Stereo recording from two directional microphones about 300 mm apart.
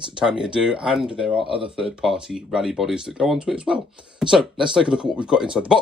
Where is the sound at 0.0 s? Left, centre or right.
Centre.